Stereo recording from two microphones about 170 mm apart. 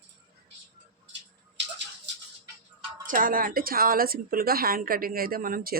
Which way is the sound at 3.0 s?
55° right (ahead or behind).